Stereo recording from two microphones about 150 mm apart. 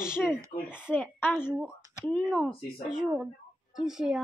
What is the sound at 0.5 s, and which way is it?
Speech, 50° left (ahead or behind).